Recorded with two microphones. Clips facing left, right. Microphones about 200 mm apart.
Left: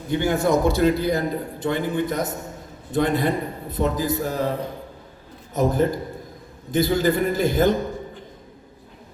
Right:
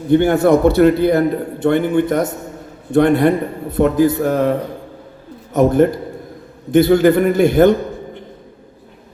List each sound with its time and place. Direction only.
0.1 s a man's voice: 60° right (ahead or behind)
5.5 s a man's voice: 70° right (ahead or behind)